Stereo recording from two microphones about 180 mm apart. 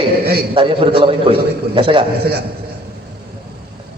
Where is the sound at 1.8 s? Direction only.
30° right (ahead or behind).